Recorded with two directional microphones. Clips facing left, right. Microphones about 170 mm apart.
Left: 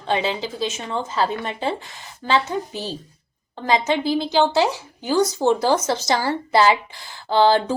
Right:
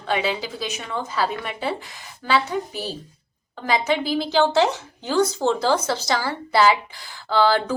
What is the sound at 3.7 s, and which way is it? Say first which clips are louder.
A woman's voice: left 2 dB; 20° left (ahead or behind).